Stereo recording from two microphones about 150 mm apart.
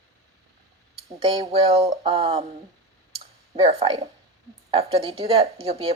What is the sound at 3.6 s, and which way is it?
Speech, 35° right (ahead or behind).